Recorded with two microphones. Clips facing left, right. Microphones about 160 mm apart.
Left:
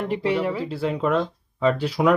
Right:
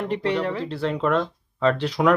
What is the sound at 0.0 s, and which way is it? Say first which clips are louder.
Speech: left 1 dB; 10° left (ahead or behind).